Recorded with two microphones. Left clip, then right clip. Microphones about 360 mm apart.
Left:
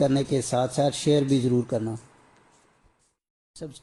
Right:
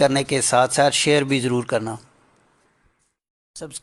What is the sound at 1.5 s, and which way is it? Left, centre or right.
Speech, right.